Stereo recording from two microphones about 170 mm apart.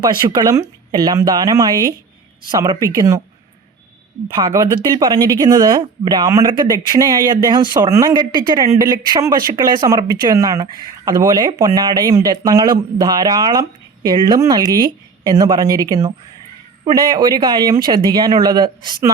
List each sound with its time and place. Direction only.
0.0 s speech: 25° right (ahead or behind)
4.4 s speech: 25° right (ahead or behind)